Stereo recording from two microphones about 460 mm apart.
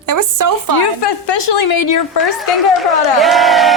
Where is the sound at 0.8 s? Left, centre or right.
Left.